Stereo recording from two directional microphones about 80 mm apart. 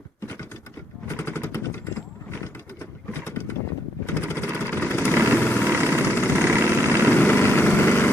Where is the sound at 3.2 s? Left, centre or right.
Left.